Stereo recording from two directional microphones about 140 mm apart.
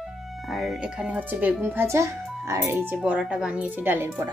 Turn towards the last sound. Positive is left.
turn(degrees=-15)  # may be behind; listen again after turning